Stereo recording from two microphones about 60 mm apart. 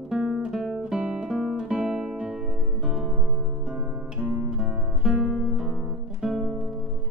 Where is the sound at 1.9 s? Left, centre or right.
Centre.